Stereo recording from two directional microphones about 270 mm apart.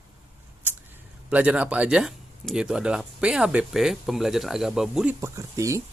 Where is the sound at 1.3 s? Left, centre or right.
Centre.